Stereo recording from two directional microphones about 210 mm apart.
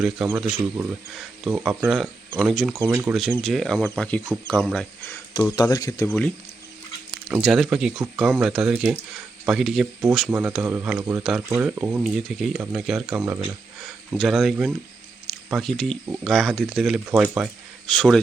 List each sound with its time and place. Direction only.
0.0 s speech: centre (ahead or behind)
5.5 s speech: 20° left (ahead or behind)
6.1 s speech: 5° left (ahead or behind)